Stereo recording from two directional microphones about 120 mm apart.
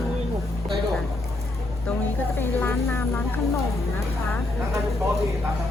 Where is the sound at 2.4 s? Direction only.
20° left (ahead or behind).